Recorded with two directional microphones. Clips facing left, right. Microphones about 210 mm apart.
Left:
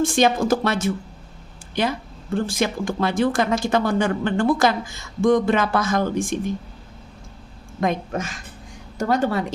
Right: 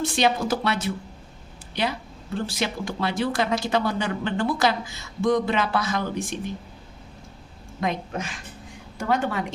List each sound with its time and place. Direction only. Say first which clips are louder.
0.0 s speech: left 4 dB; 45° left (ahead or behind)
7.8 s a woman's voice: left 4 dB; 45° left (ahead or behind)